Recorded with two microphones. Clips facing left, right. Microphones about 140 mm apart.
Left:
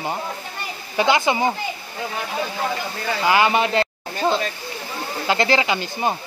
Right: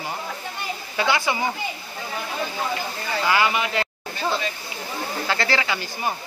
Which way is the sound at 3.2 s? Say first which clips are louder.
Left 4 dB; 20° left (ahead or behind).